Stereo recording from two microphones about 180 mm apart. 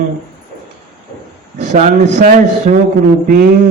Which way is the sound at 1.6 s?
40° right (ahead or behind).